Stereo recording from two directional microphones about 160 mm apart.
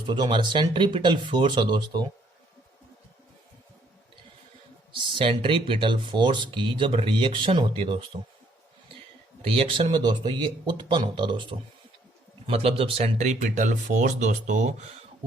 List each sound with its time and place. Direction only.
0.1 s speech: 30° right (ahead or behind)
5.1 s speech: 35° right (ahead or behind)
9.5 s speech: 35° right (ahead or behind)